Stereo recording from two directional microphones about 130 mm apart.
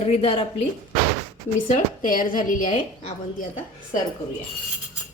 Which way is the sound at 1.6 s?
90° left.